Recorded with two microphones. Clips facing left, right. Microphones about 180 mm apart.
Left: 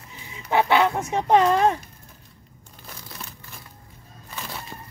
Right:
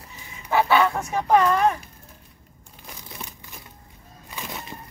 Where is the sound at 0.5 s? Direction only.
20° left (ahead or behind).